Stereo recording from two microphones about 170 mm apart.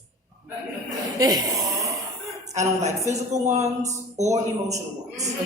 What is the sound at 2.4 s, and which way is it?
A woman's voice, 40° right (ahead or behind).